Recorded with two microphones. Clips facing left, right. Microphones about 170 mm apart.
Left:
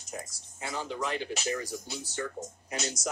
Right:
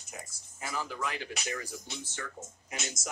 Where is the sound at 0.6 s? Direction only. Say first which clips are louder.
Left 2 dB; 25° left (ahead or behind).